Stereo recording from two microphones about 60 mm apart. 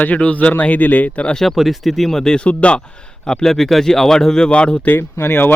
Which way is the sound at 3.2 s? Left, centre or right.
Centre.